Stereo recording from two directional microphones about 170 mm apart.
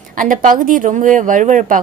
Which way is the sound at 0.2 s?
50° right (ahead or behind).